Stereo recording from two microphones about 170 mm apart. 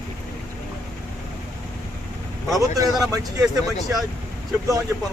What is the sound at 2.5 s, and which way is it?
Speech, 20° right (ahead or behind).